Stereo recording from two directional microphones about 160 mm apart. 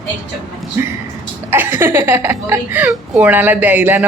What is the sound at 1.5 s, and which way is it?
A woman's voice, 15° right (ahead or behind).